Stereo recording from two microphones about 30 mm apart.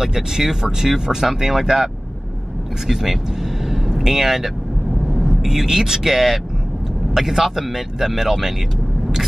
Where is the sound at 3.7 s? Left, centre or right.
Centre.